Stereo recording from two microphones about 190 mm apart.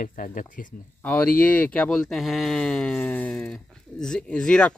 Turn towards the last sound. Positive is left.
turn(degrees=5)  # may be behind; listen again after turning